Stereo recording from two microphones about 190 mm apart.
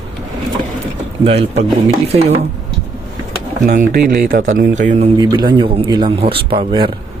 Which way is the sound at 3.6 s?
45° right (ahead or behind).